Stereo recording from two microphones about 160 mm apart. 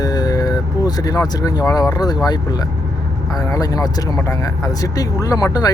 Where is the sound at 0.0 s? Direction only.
25° left (ahead or behind).